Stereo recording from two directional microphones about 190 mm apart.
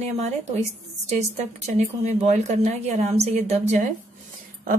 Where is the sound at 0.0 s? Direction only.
35° right (ahead or behind).